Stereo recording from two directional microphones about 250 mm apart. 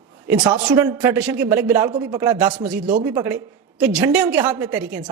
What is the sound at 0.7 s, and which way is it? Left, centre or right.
A woman's voice, centre.